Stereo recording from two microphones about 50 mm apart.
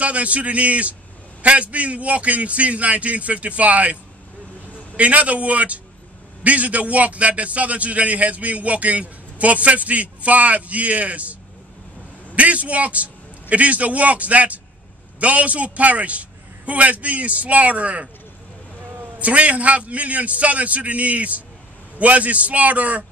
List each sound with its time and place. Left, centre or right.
0.0 s a man's voice: right
12.4 s a man's voice: right
19.1 s a man's voice: right